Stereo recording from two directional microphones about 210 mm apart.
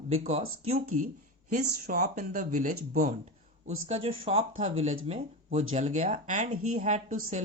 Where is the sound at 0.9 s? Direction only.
35° right (ahead or behind).